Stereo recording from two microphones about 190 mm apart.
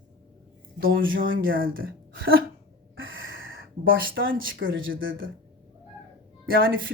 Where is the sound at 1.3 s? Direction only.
90° right.